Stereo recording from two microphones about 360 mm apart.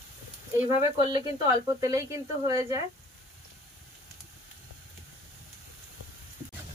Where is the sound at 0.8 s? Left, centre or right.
Centre.